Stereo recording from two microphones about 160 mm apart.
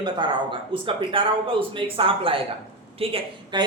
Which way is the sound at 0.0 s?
30° right (ahead or behind).